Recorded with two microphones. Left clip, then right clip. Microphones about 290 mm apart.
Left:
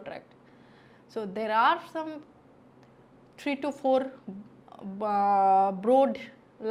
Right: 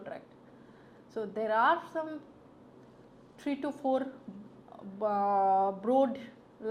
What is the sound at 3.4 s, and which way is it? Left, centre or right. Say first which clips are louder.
A woman's voice: left 4 dB; left.